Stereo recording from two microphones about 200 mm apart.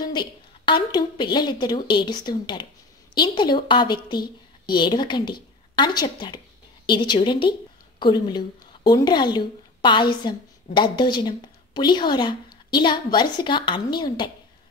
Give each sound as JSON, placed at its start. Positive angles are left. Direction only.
{"t": 0.0, "sound": "a woman's voice", "side_deg": 20}